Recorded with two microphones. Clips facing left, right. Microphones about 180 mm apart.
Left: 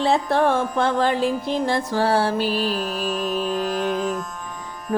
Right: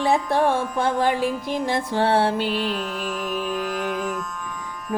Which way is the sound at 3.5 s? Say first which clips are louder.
Left 3 dB; 30° left (ahead or behind).